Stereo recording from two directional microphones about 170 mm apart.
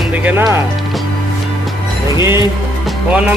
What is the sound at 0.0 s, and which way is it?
Speech, 5° right (ahead or behind).